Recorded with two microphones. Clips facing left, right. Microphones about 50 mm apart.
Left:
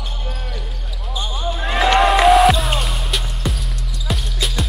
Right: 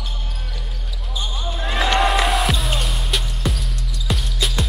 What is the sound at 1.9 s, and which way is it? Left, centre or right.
Music, centre.